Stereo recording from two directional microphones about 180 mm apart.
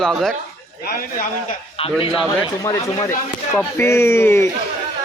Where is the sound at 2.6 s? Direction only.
15° left (ahead or behind).